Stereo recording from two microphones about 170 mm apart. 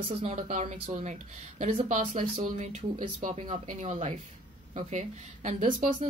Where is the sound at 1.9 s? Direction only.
50° right (ahead or behind).